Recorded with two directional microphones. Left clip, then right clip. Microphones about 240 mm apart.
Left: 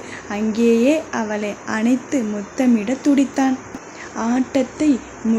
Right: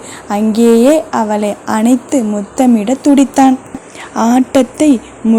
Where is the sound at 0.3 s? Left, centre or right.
Right.